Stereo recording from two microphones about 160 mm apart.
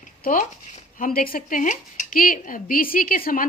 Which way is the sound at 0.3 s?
55° left (ahead or behind).